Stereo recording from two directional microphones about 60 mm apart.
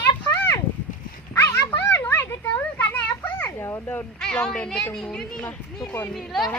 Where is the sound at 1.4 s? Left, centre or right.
Left.